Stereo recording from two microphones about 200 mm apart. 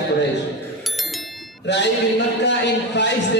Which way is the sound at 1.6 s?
60° left (ahead or behind).